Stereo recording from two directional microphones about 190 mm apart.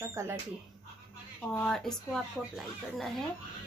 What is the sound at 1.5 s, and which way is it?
Speech, 5° left (ahead or behind).